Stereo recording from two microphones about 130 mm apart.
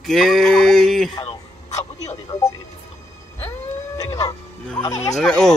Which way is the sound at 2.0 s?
25° left (ahead or behind).